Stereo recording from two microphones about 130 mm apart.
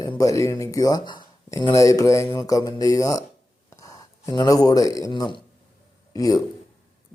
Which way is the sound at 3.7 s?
25° left (ahead or behind).